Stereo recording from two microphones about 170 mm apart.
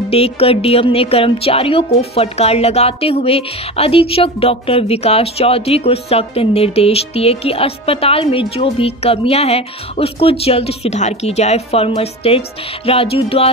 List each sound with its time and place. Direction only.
0.1 s speech: 35° left (ahead or behind)